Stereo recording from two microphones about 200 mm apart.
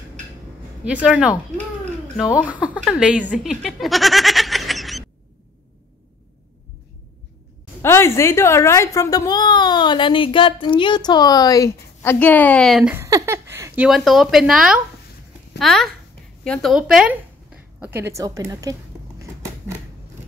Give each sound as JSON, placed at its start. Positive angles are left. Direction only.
{"t": 1.0, "sound": "a woman's voice", "side_deg": -5}
{"t": 2.4, "sound": "speech", "side_deg": -5}
{"t": 7.8, "sound": "a woman's voice", "side_deg": 15}
{"t": 12.9, "sound": "a woman's voice", "side_deg": -15}
{"t": 17.7, "sound": "a sound", "side_deg": -10}